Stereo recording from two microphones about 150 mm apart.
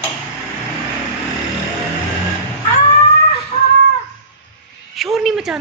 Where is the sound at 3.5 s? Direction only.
35° left (ahead or behind).